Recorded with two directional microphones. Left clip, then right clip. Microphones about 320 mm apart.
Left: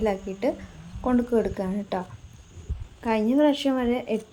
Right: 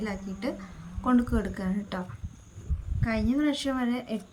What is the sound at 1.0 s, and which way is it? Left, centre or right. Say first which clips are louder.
Speech: left 4 dB; right.